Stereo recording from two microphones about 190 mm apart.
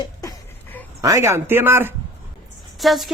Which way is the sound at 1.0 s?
15° right (ahead or behind).